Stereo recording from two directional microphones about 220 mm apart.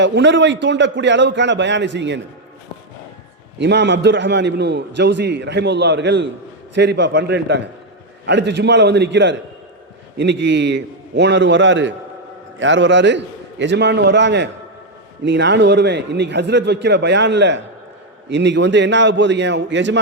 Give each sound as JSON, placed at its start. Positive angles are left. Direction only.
{"t": 0.0, "sound": "a man's voice", "side_deg": -55}
{"t": 3.6, "sound": "a man's voice", "side_deg": -50}